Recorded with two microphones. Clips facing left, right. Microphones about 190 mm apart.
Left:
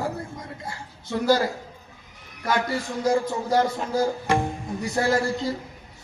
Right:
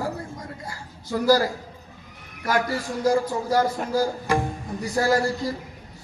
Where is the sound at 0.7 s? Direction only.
25° left (ahead or behind).